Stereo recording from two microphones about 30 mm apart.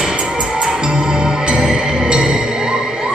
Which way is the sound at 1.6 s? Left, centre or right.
Right.